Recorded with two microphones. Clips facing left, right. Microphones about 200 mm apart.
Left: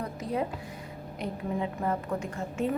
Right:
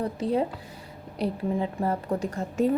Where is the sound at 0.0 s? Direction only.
30° right (ahead or behind).